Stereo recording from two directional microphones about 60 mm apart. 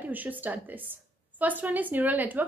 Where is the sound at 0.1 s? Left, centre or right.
Right.